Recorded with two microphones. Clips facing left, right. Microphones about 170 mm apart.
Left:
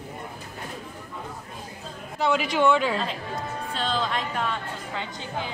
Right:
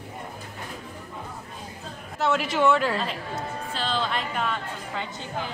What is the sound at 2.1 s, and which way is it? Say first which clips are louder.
A woman's voice: left 1 dB; centre (ahead or behind).